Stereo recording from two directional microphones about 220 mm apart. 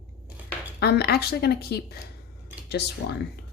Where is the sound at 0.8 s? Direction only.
45° left (ahead or behind).